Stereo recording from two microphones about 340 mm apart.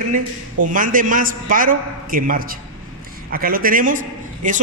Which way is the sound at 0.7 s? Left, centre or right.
Right.